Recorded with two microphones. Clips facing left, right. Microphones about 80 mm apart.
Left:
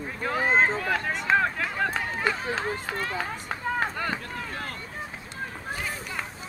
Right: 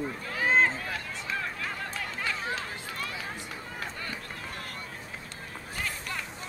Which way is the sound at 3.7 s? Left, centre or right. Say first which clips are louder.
Left 14 dB; left.